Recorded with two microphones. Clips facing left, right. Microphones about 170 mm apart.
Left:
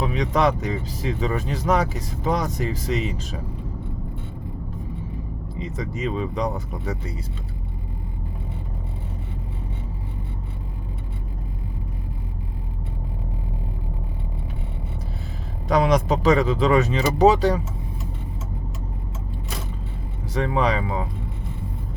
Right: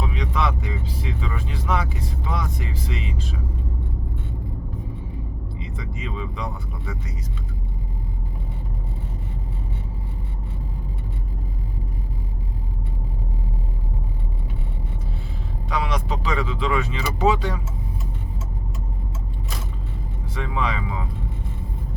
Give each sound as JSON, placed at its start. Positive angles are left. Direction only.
{"t": 0.1, "sound": "speech", "side_deg": 45}
{"t": 5.5, "sound": "speech", "side_deg": 40}
{"t": 15.7, "sound": "speech", "side_deg": 40}
{"t": 20.3, "sound": "speech", "side_deg": 40}